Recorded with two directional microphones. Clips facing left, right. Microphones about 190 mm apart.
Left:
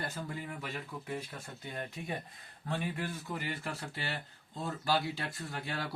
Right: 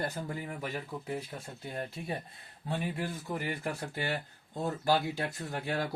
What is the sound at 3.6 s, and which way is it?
Speech, 50° right (ahead or behind).